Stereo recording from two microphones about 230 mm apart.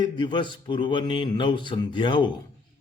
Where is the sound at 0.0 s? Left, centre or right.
Centre.